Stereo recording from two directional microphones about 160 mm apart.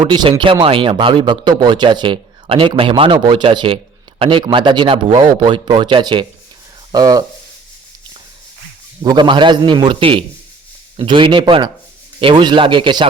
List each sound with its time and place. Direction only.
0.1 s a man's voice: 30° right (ahead or behind)
9.0 s a man's voice: 30° right (ahead or behind)